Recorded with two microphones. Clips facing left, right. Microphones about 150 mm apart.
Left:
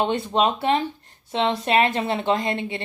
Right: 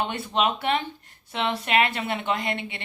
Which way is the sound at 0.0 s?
25° left (ahead or behind).